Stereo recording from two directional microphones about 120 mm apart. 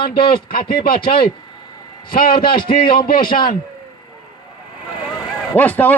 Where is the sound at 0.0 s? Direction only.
45° left (ahead or behind).